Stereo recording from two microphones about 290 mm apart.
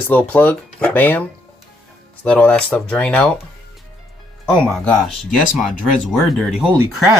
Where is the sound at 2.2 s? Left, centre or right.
Centre.